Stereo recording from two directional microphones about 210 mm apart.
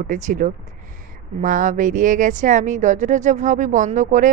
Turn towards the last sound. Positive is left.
turn(degrees=-35)  # may be behind; listen again after turning